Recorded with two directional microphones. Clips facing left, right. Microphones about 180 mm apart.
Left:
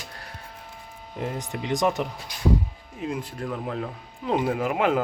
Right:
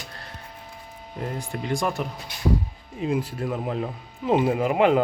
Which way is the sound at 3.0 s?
5° right (ahead or behind).